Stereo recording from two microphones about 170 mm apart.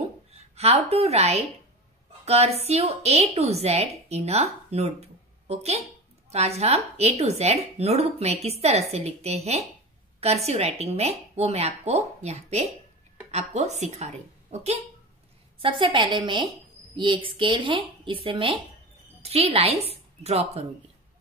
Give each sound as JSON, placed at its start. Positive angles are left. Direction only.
{"t": 0.3, "sound": "a woman's voice", "side_deg": -40}
{"t": 15.6, "sound": "a woman's voice", "side_deg": -30}